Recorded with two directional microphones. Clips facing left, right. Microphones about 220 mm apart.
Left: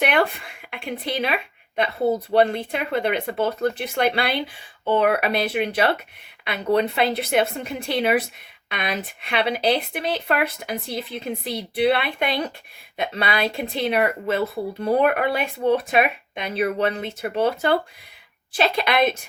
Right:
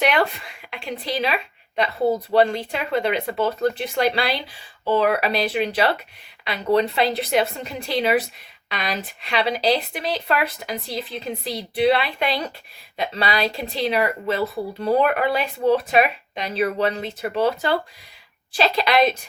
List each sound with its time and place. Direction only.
0.0 s speech: 55° left (ahead or behind)